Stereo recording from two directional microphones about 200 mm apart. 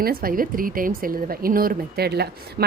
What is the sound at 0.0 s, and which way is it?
Speech, 45° right (ahead or behind).